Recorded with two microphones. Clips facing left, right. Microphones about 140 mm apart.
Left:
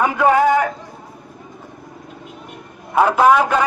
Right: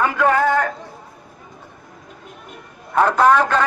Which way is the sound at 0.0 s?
15° left (ahead or behind).